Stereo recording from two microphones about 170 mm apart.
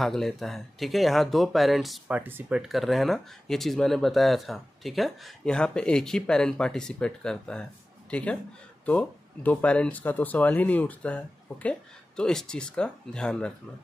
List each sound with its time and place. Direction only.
0.0 s speech: centre (ahead or behind)
2.7 s speech: centre (ahead or behind)